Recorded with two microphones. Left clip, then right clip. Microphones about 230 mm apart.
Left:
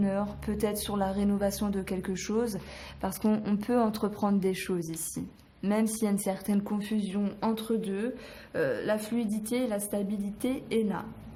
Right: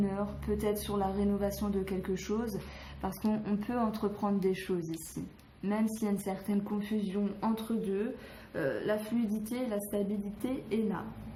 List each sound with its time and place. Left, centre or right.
0.0 s speech: left